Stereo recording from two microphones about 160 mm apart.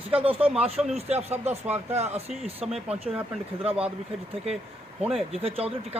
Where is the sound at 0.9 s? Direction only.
40° right (ahead or behind).